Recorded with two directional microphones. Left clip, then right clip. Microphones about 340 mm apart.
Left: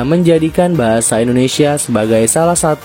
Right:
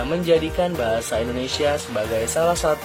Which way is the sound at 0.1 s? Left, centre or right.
Left.